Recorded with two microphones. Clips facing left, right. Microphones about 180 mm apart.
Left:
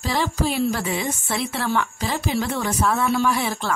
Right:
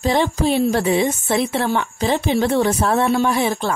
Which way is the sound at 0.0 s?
20° right (ahead or behind).